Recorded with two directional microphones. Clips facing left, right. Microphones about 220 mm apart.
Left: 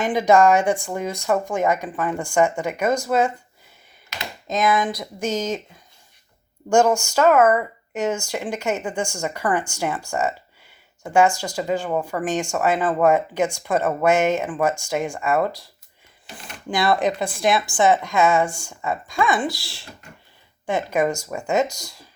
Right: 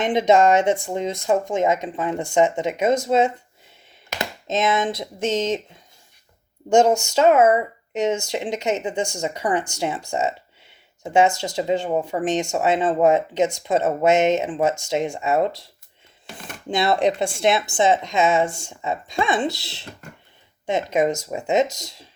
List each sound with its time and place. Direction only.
0.0 s speech: 25° right (ahead or behind)
4.4 s speech: 25° right (ahead or behind)
6.7 s speech: 20° right (ahead or behind)
16.6 s speech: 25° right (ahead or behind)